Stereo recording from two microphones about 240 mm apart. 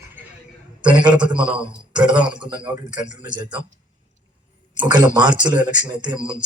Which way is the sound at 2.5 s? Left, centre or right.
Centre.